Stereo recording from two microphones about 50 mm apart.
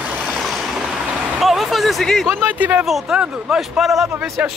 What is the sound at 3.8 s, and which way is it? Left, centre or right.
Speech, centre.